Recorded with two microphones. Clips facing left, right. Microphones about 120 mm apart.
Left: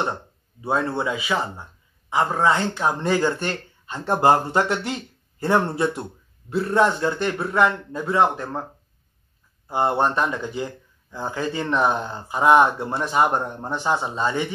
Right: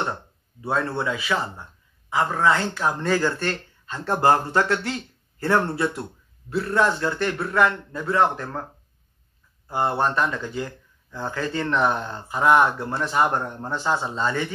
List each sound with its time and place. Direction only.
0.0 s a man's voice: 15° left (ahead or behind)
9.7 s speech: 20° left (ahead or behind)